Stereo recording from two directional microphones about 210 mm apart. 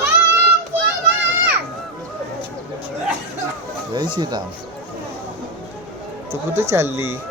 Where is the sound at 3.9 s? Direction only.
20° right (ahead or behind).